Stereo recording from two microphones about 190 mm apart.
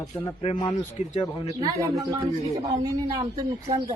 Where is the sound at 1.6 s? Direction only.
20° right (ahead or behind).